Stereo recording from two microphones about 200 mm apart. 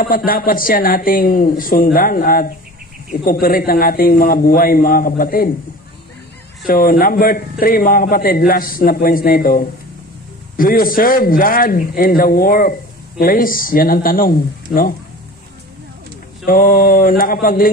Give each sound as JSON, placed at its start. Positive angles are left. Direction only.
{"t": 0.0, "sound": "a man's voice", "side_deg": 45}
{"t": 6.7, "sound": "a man's voice", "side_deg": 45}
{"t": 16.4, "sound": "a man's voice", "side_deg": 45}